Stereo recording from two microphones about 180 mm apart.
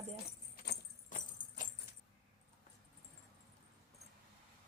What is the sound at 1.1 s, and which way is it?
Jingle bell, 45° left (ahead or behind).